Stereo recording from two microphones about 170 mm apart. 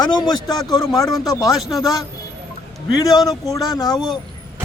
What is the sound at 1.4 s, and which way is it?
Speech, centre (ahead or behind).